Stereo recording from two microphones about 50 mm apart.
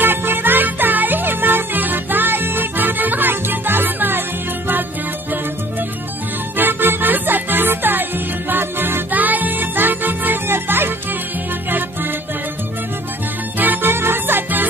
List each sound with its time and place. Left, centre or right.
0.0 s music: right
6.5 s music: right
9.1 s music: right
13.6 s music: right